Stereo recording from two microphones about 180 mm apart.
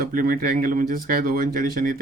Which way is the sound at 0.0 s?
55° right (ahead or behind).